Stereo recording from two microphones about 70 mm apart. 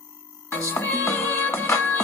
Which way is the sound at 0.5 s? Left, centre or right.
Left.